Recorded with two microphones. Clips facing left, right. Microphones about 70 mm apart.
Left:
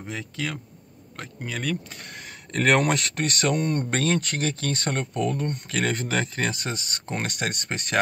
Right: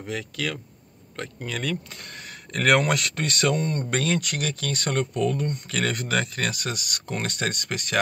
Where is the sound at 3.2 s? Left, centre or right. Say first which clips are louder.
Left 1 dB; left.